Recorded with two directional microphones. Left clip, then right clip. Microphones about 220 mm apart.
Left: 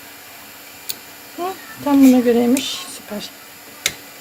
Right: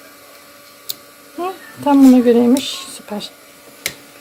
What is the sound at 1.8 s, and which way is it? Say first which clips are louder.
A woman's voice: right 3 dB; 20° right (ahead or behind).